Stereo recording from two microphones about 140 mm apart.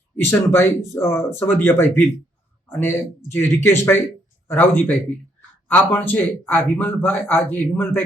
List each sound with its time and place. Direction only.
0.2 s speech: 15° left (ahead or behind)